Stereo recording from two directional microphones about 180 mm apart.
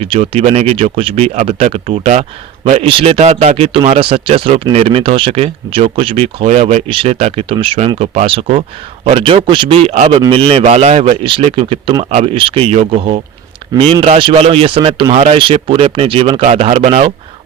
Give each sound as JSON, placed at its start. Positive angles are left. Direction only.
{"t": 0.0, "sound": "speech", "side_deg": -35}